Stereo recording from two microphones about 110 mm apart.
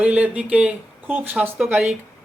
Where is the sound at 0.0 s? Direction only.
10° right (ahead or behind).